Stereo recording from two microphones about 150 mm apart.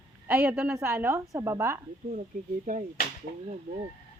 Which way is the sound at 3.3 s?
75° left (ahead or behind).